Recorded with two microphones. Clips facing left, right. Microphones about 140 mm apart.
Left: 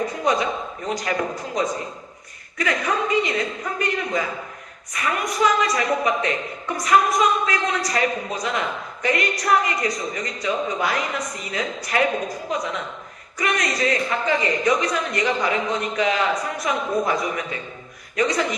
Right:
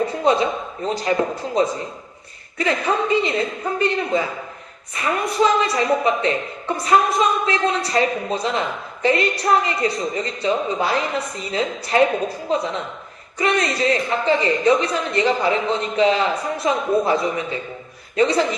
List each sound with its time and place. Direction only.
0.0 s speech: 30° right (ahead or behind)